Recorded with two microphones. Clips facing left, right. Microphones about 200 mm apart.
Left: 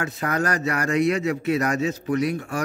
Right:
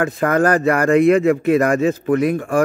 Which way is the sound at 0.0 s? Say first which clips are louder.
Right 9 dB; 50° right (ahead or behind).